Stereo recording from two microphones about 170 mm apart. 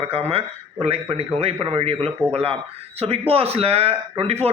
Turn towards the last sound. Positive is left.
turn(degrees=-35)  # may be behind; listen again after turning